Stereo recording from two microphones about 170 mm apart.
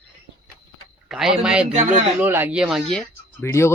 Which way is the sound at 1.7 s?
45° right (ahead or behind).